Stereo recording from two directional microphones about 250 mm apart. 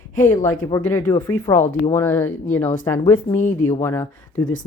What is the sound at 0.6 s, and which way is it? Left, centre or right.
A woman's voice, centre.